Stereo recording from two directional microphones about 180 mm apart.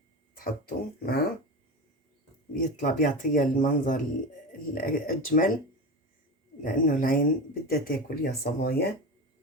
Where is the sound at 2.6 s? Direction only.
45° left (ahead or behind).